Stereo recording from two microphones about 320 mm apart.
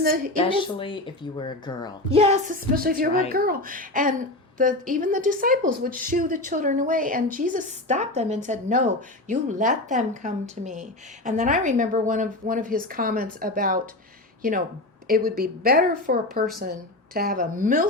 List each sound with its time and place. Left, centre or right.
0.0 s speech: right
0.3 s speech: centre
2.0 s speech: centre
15.0 s speech: right